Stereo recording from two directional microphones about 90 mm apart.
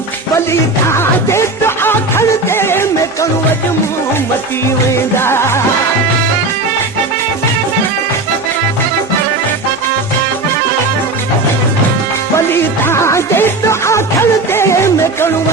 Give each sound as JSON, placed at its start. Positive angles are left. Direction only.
{"t": 0.9, "sound": "music", "side_deg": 30}
{"t": 5.1, "sound": "music", "side_deg": 30}
{"t": 12.5, "sound": "music", "side_deg": 25}